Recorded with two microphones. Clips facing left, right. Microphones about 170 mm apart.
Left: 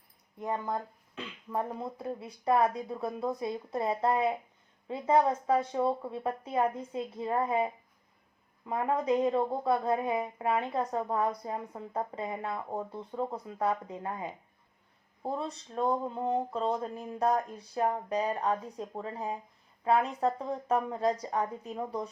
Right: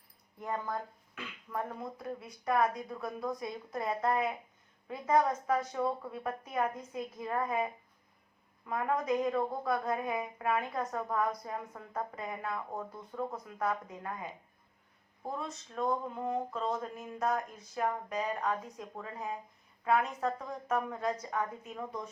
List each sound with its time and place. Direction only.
0.3 s a woman's voice: 20° left (ahead or behind)